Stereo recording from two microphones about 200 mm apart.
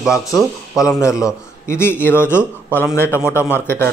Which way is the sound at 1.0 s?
15° left (ahead or behind).